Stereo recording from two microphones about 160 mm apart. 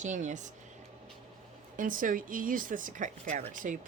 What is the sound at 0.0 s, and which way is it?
Speech, 50° right (ahead or behind).